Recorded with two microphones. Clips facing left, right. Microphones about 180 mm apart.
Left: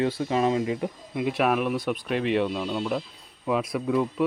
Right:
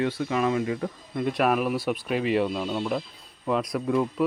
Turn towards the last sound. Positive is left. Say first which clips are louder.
# even
turn(degrees=0)  # may be behind; listen again after turning